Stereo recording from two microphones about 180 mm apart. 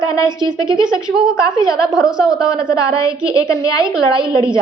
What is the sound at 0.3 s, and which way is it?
Speech, 25° right (ahead or behind).